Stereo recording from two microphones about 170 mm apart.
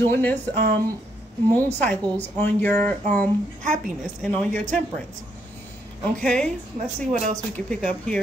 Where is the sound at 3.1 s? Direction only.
50° right (ahead or behind).